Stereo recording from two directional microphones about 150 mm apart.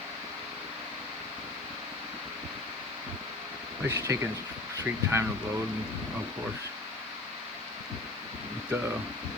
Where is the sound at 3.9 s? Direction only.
20° right (ahead or behind).